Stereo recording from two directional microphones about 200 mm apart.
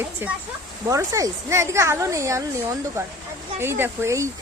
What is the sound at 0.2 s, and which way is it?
Speech, 10° right (ahead or behind).